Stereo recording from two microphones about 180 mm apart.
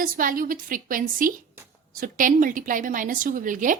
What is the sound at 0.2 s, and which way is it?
A woman's voice, 50° right (ahead or behind).